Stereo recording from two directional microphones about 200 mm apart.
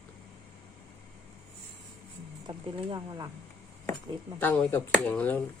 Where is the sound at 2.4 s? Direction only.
20° right (ahead or behind).